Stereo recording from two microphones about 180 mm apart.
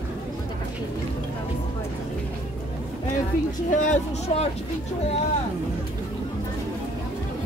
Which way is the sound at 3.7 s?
45° left (ahead or behind).